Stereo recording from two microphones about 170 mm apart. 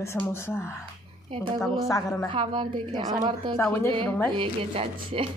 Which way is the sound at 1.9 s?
20° left (ahead or behind).